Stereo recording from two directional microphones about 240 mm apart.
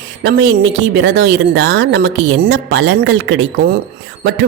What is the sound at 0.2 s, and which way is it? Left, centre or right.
Speech, right.